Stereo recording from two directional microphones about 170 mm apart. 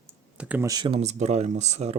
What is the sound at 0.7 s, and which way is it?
Speech, 30° right (ahead or behind).